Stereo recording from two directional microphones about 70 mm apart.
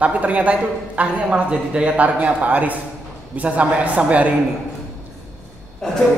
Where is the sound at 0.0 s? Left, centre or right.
Right.